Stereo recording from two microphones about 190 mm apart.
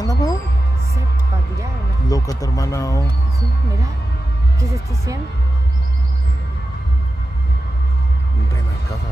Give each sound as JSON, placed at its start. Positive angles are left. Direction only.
{"t": 0.0, "sound": "music", "side_deg": 20}
{"t": 2.0, "sound": "speech", "side_deg": 20}
{"t": 4.6, "sound": "speech", "side_deg": -15}